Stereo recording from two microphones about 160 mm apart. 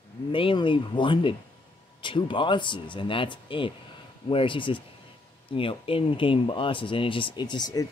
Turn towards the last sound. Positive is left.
turn(degrees=25)  # may be behind; listen again after turning